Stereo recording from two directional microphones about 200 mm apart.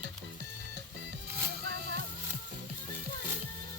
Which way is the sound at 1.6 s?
55° right (ahead or behind).